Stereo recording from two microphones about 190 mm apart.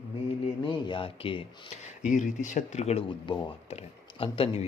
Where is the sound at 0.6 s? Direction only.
25° left (ahead or behind).